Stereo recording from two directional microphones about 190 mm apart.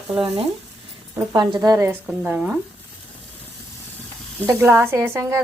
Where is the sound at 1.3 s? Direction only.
20° right (ahead or behind).